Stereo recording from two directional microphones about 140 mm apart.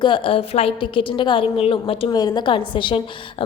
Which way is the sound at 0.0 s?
40° left (ahead or behind).